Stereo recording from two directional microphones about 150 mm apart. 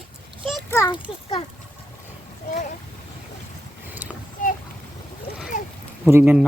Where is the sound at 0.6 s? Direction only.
20° left (ahead or behind).